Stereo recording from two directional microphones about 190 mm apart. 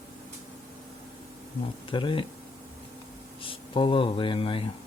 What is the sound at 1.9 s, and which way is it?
Speech, 25° left (ahead or behind).